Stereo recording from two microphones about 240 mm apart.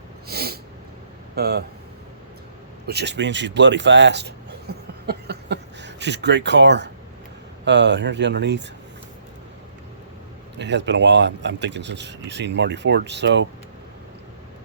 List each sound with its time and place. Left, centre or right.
0.3 s sneeze: right
1.4 s speech: right
2.8 s speech: right
10.6 s speech: right